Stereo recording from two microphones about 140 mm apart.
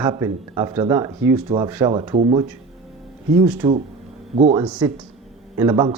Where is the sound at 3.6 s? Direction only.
35° right (ahead or behind).